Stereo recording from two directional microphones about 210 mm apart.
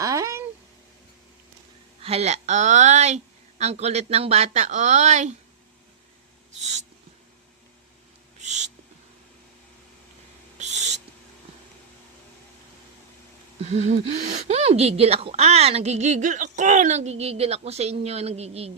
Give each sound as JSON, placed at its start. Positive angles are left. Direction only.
{"t": 0.0, "sound": "a sound", "side_deg": -15}
{"t": 2.0, "sound": "speech", "side_deg": -30}
{"t": 6.6, "sound": "speech", "side_deg": -35}
{"t": 8.4, "sound": "a sound", "side_deg": -35}
{"t": 10.6, "sound": "owl", "side_deg": -35}
{"t": 13.7, "sound": "speech", "side_deg": -30}